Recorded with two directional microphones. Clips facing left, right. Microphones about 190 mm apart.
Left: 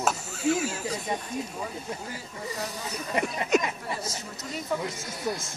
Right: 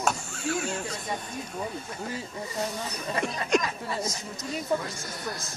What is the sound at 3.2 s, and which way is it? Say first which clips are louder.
Speech: left 1 dB; 20° left (ahead or behind).